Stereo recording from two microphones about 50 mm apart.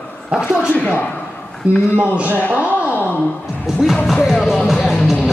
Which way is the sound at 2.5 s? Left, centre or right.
Right.